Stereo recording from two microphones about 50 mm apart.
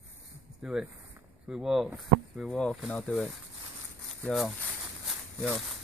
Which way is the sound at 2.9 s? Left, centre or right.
Left.